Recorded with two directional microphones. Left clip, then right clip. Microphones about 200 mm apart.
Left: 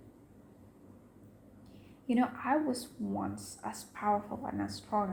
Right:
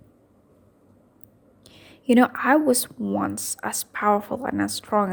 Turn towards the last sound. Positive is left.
turn(degrees=-55)  # may be behind; listen again after turning